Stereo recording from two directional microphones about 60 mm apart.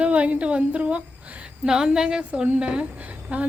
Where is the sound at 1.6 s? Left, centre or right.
Centre; by 3.5 s right.